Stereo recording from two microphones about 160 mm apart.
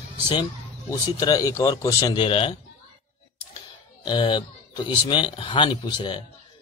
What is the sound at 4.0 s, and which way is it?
A man's voice, 30° left (ahead or behind).